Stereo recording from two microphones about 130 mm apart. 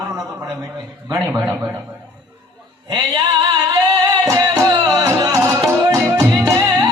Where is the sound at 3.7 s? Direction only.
30° right (ahead or behind).